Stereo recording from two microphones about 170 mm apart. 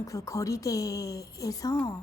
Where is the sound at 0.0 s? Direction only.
20° left (ahead or behind).